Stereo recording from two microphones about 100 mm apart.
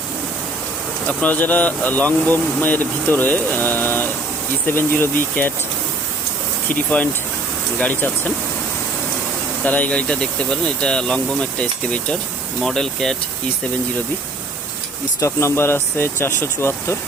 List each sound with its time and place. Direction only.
1.0 s speech: 15° left (ahead or behind)
6.7 s speech: 15° left (ahead or behind)
9.6 s speech: 15° left (ahead or behind)
15.2 s speech: 30° left (ahead or behind)